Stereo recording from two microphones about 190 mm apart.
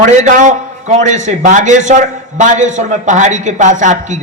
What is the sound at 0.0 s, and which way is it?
A man's voice, 40° right (ahead or behind).